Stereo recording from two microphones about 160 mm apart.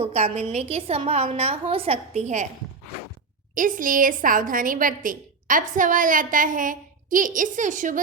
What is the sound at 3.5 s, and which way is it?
A woman's voice, 60° right (ahead or behind).